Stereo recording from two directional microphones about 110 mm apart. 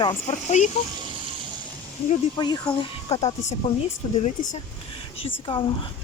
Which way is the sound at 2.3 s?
40° left (ahead or behind).